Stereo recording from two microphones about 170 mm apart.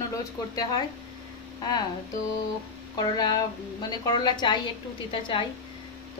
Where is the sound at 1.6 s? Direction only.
25° left (ahead or behind).